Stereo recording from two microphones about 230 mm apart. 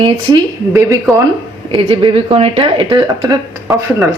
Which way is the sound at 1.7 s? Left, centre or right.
Right.